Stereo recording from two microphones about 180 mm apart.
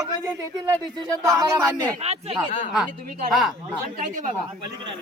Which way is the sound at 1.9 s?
35° right (ahead or behind).